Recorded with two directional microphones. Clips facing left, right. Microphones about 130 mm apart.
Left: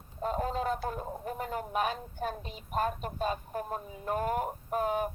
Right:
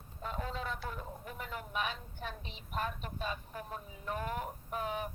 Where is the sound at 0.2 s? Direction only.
40° left (ahead or behind).